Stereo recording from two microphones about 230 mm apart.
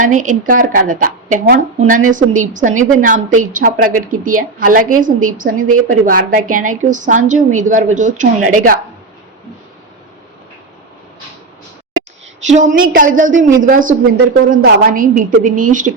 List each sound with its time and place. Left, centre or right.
0.0 s a woman's voice: right
12.5 s a woman's voice: right